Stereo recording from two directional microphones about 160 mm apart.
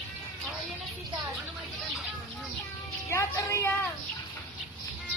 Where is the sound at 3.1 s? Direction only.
15° left (ahead or behind).